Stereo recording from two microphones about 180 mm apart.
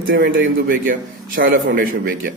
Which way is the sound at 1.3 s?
50° right (ahead or behind).